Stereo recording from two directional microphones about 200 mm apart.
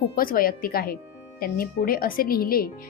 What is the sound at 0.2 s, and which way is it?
Speech, 45° left (ahead or behind).